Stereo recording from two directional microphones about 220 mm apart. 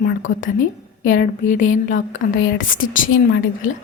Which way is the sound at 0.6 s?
40° left (ahead or behind).